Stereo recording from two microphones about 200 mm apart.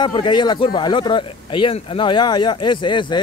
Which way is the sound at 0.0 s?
25° left (ahead or behind).